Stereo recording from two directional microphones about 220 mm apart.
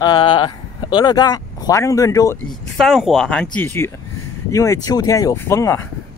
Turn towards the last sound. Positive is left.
turn(degrees=10)  # may be behind; listen again after turning